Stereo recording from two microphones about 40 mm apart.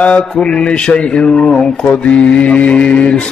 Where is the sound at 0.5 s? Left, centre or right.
Left.